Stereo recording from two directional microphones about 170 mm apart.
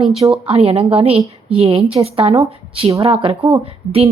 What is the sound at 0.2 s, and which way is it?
A woman's voice, 35° right (ahead or behind).